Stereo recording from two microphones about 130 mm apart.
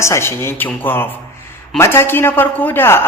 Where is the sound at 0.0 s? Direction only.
20° left (ahead or behind).